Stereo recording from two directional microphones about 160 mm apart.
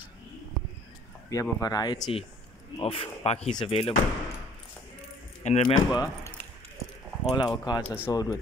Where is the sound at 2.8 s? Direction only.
40° left (ahead or behind).